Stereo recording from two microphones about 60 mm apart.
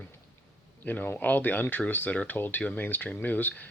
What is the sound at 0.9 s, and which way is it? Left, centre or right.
Speech, left.